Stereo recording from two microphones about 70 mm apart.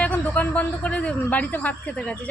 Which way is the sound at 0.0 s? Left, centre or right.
Left.